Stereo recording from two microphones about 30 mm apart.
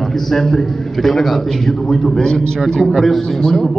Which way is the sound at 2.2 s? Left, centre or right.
Left.